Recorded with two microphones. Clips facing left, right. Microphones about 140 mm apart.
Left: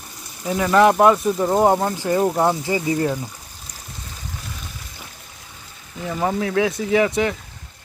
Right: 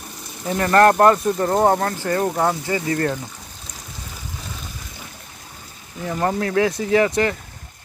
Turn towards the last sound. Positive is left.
turn(degrees=0)  # may be behind; listen again after turning